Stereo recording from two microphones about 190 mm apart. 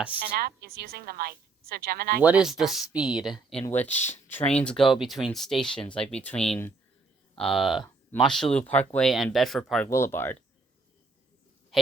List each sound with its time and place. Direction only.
0.2 s a woman's voice: 55° right (ahead or behind)
2.2 s speech: 5° right (ahead or behind)
3.8 s speech: 35° left (ahead or behind)
4.1 s speech: 10° left (ahead or behind)